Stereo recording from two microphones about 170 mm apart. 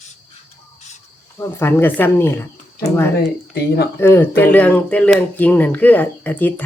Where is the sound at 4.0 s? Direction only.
15° left (ahead or behind).